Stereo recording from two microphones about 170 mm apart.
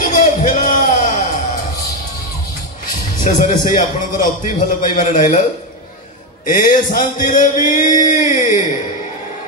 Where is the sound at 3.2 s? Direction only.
50° left (ahead or behind).